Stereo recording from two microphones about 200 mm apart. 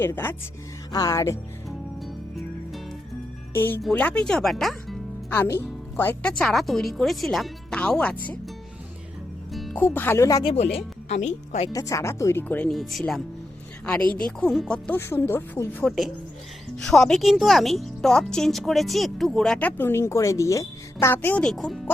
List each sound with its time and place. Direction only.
0.0 s speech: 10° left (ahead or behind)
2.0 s music: centre (ahead or behind)
3.5 s speech: 10° left (ahead or behind)
9.5 s speech: centre (ahead or behind); by 10.5 s 15° left (ahead or behind)
10.5 s speech: 35° left (ahead or behind)
11.7 s speech: 15° left (ahead or behind); by 13.2 s centre (ahead or behind)
14.3 s speech: 5° left (ahead or behind)
15.9 s speech: centre (ahead or behind)